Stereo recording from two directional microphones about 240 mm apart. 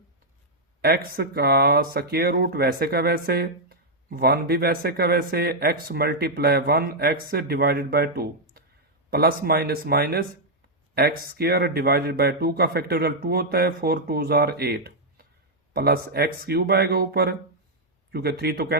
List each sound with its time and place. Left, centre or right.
0.8 s speech: right